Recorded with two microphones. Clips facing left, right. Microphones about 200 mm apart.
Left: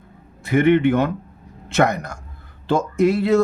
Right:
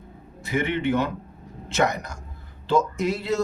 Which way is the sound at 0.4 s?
55° left (ahead or behind).